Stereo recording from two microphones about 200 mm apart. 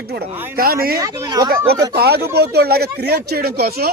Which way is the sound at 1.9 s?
55° right (ahead or behind).